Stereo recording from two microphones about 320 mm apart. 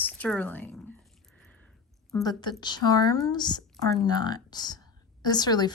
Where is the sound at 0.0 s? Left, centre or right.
Centre.